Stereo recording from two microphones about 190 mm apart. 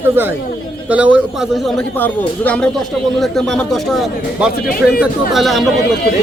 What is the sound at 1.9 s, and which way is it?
A man's voice, 10° left (ahead or behind).